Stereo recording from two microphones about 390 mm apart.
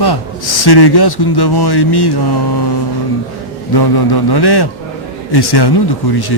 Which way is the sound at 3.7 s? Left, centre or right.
Left.